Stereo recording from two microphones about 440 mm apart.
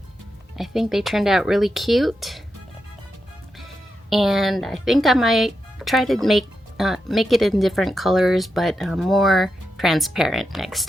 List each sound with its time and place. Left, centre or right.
0.5 s speech: centre
4.1 s speech: centre